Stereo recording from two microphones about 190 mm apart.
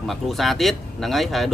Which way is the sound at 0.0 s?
Centre (ahead or behind).